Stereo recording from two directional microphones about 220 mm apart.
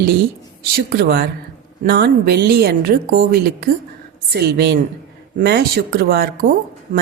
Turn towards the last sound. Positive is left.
turn(degrees=-40)  # may be behind; listen again after turning